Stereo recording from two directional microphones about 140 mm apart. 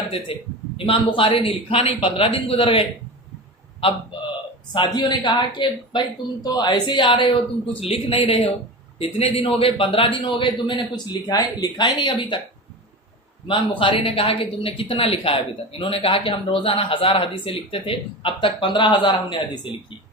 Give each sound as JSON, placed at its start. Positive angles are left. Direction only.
{"t": 0.3, "sound": "speech", "side_deg": 40}
{"t": 4.9, "sound": "a man's voice", "side_deg": 30}
{"t": 13.5, "sound": "speech", "side_deg": 40}